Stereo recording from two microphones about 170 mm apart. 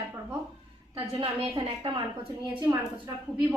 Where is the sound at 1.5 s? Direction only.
25° right (ahead or behind).